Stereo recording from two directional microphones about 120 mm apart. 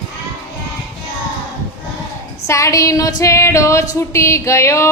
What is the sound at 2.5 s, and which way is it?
Female singing, 25° left (ahead or behind).